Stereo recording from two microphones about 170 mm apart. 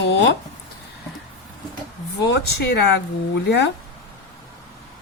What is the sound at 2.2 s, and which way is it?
Speech, 85° left.